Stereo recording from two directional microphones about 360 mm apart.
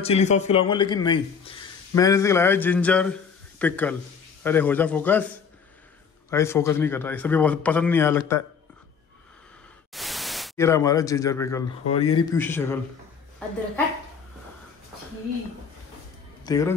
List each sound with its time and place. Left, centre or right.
0.0 s a man's voice: centre
6.3 s a man's voice: centre
9.9 s a man's voice: centre
16.4 s a man's voice: centre